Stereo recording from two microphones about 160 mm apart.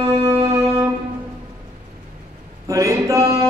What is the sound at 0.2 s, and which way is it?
Music, 20° right (ahead or behind).